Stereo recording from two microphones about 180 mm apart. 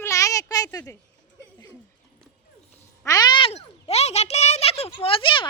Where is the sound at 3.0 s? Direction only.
20° left (ahead or behind).